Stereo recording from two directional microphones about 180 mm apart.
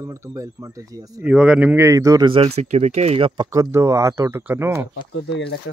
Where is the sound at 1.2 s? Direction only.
5° right (ahead or behind); by 3.5 s 30° right (ahead or behind).